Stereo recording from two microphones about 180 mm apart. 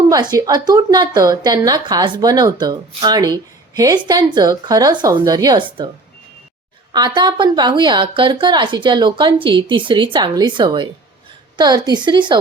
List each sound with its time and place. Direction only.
0.1 s a woman's voice: 20° right (ahead or behind)
6.9 s a woman's voice: 25° right (ahead or behind)